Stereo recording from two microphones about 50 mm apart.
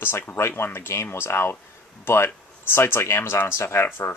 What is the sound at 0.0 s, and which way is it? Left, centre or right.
Speech, left.